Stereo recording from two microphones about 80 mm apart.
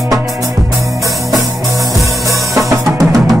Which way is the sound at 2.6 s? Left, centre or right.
Right.